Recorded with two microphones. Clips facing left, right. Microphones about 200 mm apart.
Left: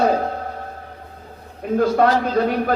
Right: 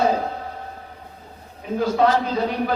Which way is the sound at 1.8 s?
50° left (ahead or behind).